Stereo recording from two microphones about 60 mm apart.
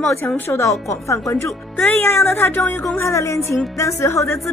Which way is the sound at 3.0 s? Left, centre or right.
Left.